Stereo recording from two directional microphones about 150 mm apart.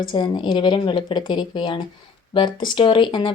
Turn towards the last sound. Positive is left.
turn(degrees=35)  # may be behind; listen again after turning